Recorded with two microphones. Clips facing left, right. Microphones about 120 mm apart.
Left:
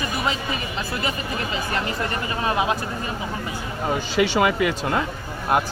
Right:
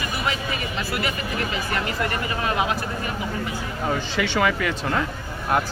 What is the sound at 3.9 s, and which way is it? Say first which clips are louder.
Speech: left 5 dB; 15° left (ahead or behind).